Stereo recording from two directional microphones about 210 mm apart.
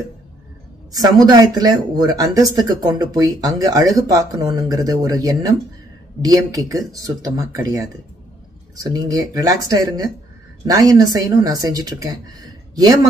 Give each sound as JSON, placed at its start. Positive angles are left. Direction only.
{"t": 0.9, "sound": "speech", "side_deg": -20}